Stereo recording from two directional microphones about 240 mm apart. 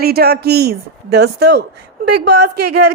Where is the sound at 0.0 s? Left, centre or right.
Right.